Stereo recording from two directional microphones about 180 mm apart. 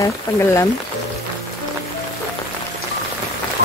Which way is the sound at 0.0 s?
15° left (ahead or behind).